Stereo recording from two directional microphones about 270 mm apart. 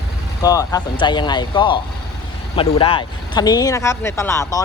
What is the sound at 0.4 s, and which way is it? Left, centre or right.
Speech, centre.